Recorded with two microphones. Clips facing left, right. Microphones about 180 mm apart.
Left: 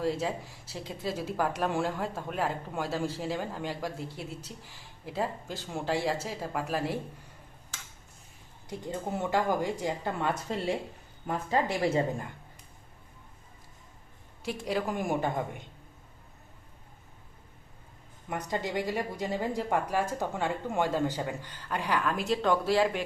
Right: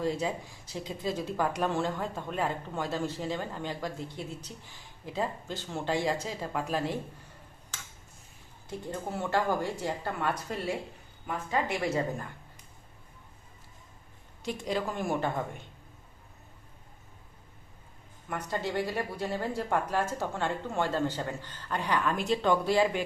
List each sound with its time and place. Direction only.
0.0 s a woman's voice: 5° left (ahead or behind)
8.6 s speech: 15° left (ahead or behind); by 12.0 s 30° left (ahead or behind)
14.4 s a woman's voice: 5° left (ahead or behind)
18.3 s a woman's voice: 15° left (ahead or behind); by 23.0 s centre (ahead or behind)